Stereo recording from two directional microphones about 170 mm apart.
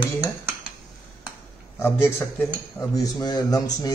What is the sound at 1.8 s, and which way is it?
A man's voice, 15° left (ahead or behind).